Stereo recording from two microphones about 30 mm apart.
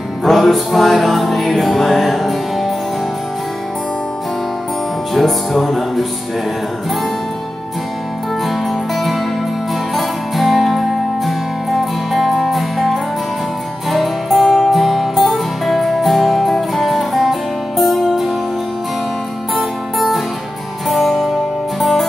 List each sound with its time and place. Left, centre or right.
0.2 s music: centre
5.1 s music: centre
8.5 s music: centre
19.5 s music: centre